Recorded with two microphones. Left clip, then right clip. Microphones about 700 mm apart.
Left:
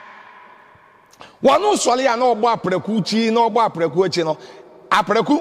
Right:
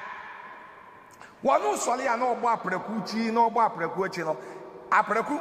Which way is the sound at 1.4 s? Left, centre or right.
Left.